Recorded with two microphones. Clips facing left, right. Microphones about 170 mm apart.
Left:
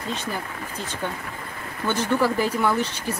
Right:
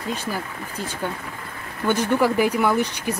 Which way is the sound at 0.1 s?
10° right (ahead or behind).